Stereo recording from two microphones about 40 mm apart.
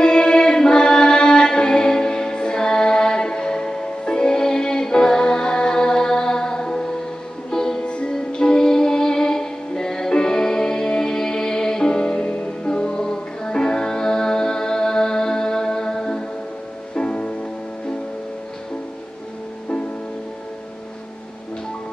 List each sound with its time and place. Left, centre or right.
0.0 s music: left
7.8 s music: left